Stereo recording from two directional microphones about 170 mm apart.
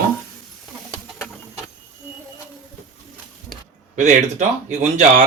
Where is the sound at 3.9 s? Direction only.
45° right (ahead or behind).